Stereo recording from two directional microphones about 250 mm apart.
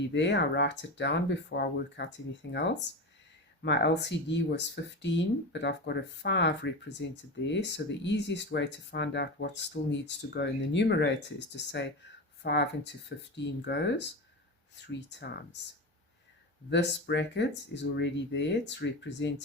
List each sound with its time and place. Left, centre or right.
0.1 s speech: left
16.6 s speech: left